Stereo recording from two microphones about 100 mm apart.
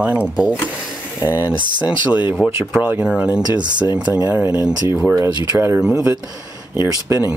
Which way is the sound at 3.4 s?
45° right (ahead or behind).